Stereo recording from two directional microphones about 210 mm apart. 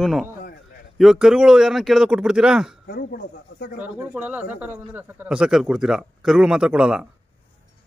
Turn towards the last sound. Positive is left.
turn(degrees=-5)  # may be behind; listen again after turning